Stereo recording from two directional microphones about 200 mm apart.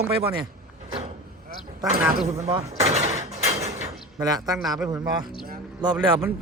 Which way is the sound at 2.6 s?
35° right (ahead or behind).